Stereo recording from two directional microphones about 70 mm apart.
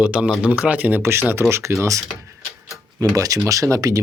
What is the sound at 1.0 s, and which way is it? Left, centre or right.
Speech, right.